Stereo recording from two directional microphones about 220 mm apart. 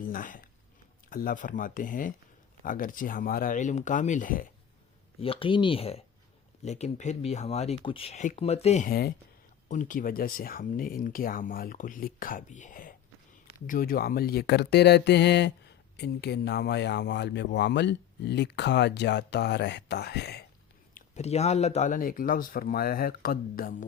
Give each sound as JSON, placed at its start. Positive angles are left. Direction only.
{"t": 0.1, "sound": "speech", "side_deg": 40}
{"t": 5.2, "sound": "speech", "side_deg": 25}
{"t": 8.9, "sound": "speech", "side_deg": 45}
{"t": 20.9, "sound": "speech", "side_deg": 30}